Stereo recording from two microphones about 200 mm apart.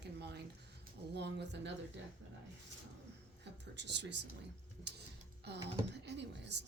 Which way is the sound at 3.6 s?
60° right (ahead or behind).